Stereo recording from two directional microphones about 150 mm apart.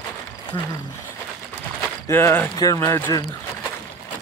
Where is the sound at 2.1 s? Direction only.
15° left (ahead or behind).